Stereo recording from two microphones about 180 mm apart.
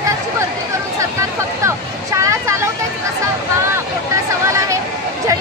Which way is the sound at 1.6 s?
15° right (ahead or behind).